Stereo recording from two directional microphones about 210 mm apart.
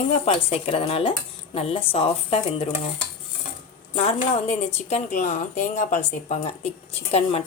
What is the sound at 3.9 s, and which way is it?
A woman's voice, 30° left (ahead or behind).